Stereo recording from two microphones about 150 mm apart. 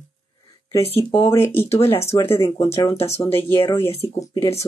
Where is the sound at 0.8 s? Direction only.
35° left (ahead or behind).